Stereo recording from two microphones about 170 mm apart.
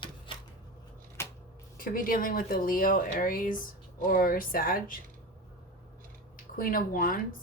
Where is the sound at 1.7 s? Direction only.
55° left (ahead or behind).